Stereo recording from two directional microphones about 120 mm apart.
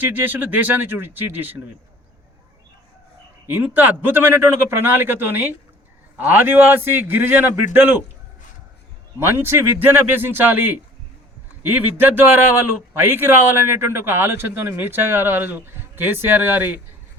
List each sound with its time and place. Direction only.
0.0 s a man's voice: 15° right (ahead or behind)
3.4 s a man's voice: 15° right (ahead or behind)
9.1 s a man's voice: 20° right (ahead or behind)